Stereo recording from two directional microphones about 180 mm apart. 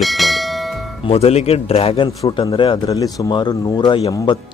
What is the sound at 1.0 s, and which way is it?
Speech, 35° left (ahead or behind).